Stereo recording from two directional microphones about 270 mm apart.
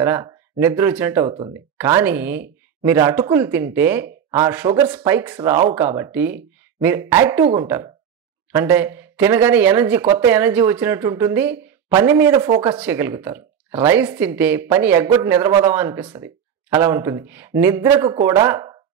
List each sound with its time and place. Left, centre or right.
0.0 s speech: centre